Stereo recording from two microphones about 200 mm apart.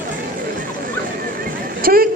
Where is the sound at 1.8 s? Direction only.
45° right (ahead or behind).